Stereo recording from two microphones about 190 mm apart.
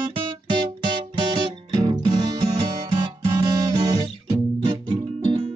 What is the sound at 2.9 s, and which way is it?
Guitar, 25° right (ahead or behind).